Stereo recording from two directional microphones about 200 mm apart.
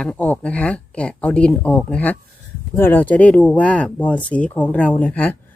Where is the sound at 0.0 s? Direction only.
5° left (ahead or behind).